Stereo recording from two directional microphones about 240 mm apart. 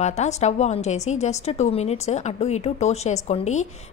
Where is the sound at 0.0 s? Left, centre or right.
Left.